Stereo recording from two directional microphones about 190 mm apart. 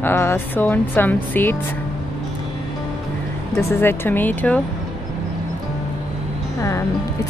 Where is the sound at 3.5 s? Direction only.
15° left (ahead or behind).